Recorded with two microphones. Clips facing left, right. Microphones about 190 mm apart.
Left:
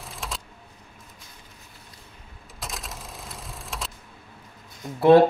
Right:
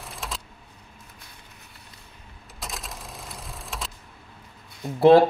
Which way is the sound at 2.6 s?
Centre (ahead or behind).